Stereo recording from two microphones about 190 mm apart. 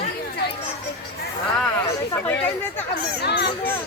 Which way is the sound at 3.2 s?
60° left (ahead or behind).